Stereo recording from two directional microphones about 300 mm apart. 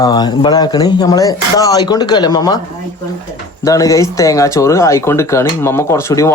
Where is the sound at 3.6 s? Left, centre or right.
Centre.